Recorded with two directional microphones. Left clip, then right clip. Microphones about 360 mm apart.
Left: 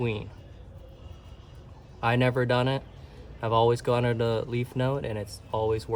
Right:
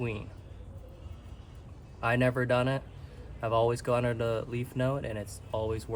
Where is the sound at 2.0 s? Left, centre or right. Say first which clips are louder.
Left 3 dB; left.